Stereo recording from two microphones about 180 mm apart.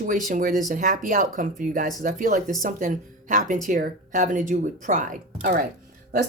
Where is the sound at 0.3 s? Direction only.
50° right (ahead or behind).